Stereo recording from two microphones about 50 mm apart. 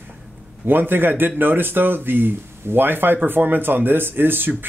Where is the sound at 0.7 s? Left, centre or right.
Right.